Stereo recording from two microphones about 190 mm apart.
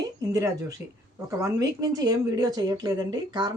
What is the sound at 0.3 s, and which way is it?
Speech, 15° right (ahead or behind).